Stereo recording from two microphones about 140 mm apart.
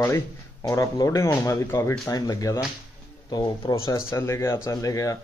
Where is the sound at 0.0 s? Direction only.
20° left (ahead or behind).